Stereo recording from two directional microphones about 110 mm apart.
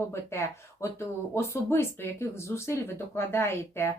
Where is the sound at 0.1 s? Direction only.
25° left (ahead or behind).